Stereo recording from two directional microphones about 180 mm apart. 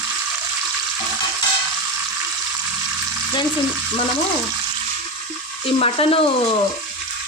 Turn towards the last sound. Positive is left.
turn(degrees=30)  # may be behind; listen again after turning